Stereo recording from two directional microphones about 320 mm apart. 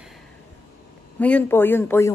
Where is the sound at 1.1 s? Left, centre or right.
Centre.